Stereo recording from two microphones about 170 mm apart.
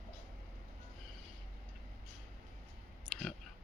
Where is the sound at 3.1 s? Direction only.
Centre (ahead or behind).